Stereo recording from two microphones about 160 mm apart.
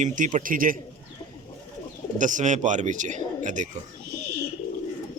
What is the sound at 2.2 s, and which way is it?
A man's voice, 50° right (ahead or behind).